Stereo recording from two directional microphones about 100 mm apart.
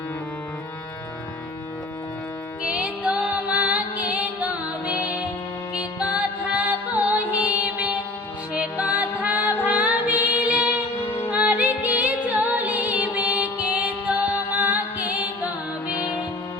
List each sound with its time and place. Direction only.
2.6 s music: 10° right (ahead or behind)
6.5 s music: 15° right (ahead or behind)
10.9 s music: 25° left (ahead or behind)
11.3 s music: 15° right (ahead or behind)